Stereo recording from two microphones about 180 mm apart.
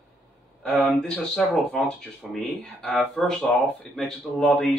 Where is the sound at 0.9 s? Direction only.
5° left (ahead or behind).